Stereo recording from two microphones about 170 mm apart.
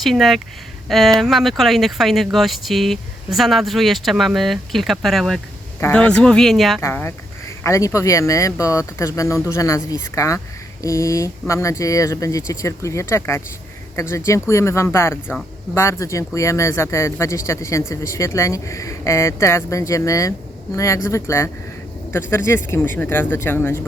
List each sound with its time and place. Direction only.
0.0 s speech: centre (ahead or behind)
6.8 s speech: 15° left (ahead or behind)